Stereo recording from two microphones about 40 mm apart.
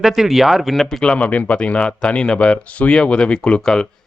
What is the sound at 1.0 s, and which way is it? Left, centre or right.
A man's voice, left.